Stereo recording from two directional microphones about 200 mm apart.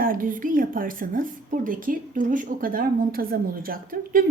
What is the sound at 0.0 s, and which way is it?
A woman's voice, 45° right (ahead or behind).